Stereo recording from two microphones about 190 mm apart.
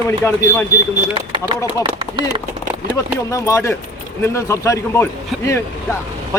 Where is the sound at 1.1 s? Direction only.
25° right (ahead or behind).